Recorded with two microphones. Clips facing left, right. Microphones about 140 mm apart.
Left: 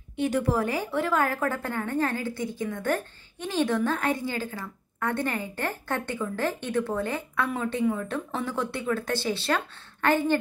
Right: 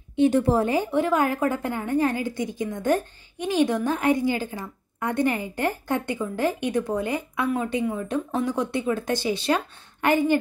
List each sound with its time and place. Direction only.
0.1 s a woman's voice: 25° right (ahead or behind)